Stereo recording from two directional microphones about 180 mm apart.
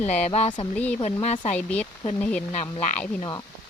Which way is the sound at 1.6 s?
10° left (ahead or behind).